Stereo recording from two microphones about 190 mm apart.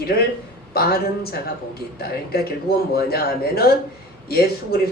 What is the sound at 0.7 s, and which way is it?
A woman's voice, 55° left (ahead or behind).